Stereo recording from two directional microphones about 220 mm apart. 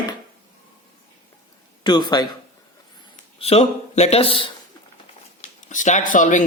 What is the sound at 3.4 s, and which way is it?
Speech, 25° left (ahead or behind).